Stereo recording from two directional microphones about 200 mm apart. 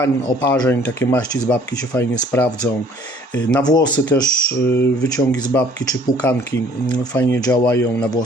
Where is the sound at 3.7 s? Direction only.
20° left (ahead or behind).